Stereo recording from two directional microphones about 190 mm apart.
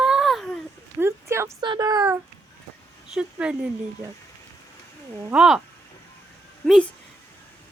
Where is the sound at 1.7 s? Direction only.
20° right (ahead or behind).